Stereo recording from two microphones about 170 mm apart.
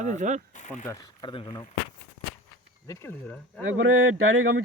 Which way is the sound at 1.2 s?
30° left (ahead or behind).